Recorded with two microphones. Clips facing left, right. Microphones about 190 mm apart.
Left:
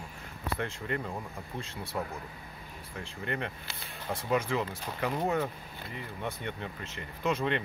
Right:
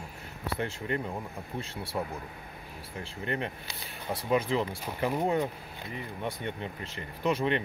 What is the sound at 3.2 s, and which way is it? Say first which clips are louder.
Speech: right 2 dB; 15° right (ahead or behind).